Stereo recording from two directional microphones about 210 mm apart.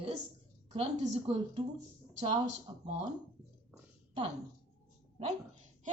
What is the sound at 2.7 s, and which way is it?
Speech, 20° right (ahead or behind).